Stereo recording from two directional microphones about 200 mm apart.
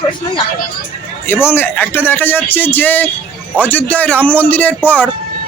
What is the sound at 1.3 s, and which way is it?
Speech, 10° left (ahead or behind).